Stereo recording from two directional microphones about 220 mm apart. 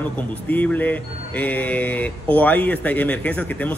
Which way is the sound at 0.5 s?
10° left (ahead or behind).